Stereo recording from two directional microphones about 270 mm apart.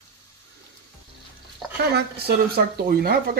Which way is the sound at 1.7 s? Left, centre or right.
Right.